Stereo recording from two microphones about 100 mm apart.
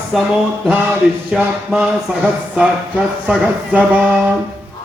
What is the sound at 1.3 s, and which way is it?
Speech, 10° right (ahead or behind).